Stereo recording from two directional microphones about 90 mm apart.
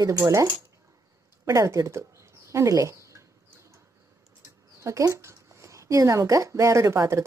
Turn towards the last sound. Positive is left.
turn(degrees=-35)  # may be behind; listen again after turning